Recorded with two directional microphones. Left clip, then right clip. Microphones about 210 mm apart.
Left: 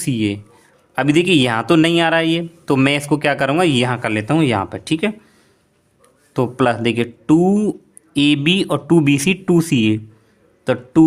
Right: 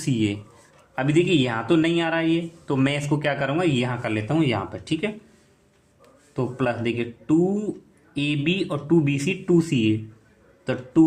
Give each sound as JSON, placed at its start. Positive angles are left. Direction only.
{"t": 0.0, "sound": "a man's voice", "side_deg": 30}
{"t": 0.9, "sound": "speech", "side_deg": 45}
{"t": 6.3, "sound": "speech", "side_deg": 55}